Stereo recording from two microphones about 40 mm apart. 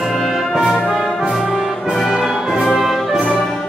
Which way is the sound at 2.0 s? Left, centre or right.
Centre.